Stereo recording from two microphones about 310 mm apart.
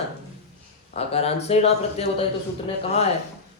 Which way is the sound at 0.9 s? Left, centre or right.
Centre.